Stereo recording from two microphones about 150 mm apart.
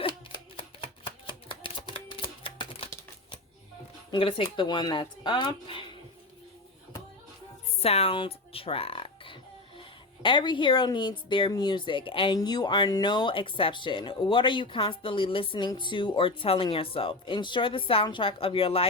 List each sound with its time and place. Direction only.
0.0 s typewriter: 35° left (ahead or behind)
4.1 s speech: 35° left (ahead or behind)
7.8 s music: 40° left (ahead or behind)
10.2 s speech: 30° left (ahead or behind)